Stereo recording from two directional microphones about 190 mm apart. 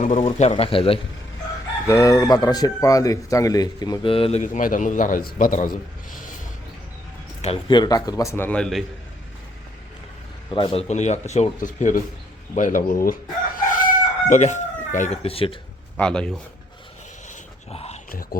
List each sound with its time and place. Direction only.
0.2 s speech: 35° left (ahead or behind)
1.9 s a man's voice: 15° left (ahead or behind); by 6.3 s 45° left (ahead or behind)
7.4 s a man's voice: 25° left (ahead or behind); by 8.8 s 5° left (ahead or behind)
10.5 s a man's voice: 25° left (ahead or behind); by 13.1 s 45° left (ahead or behind)
13.7 s chicken: 45° left (ahead or behind)
16.0 s a man's voice: 5° left (ahead or behind)
17.2 s dog: 35° left (ahead or behind)
18.1 s a man's voice: 50° left (ahead or behind)